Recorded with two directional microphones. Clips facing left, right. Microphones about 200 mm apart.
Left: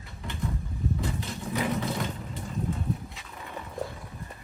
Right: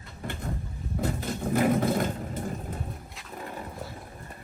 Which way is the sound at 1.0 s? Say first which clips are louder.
Right 4 dB; 50° right (ahead or behind).